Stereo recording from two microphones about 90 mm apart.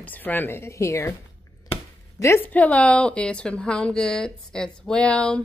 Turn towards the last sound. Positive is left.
turn(degrees=10)  # may be behind; listen again after turning